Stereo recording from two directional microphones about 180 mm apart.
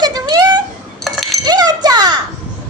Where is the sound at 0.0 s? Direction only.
20° right (ahead or behind).